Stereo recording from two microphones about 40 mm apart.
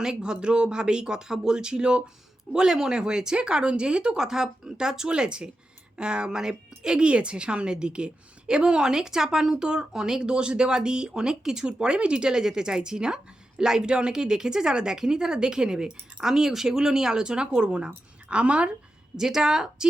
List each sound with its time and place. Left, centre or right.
0.0 s a woman's voice: centre
19.1 s speech: centre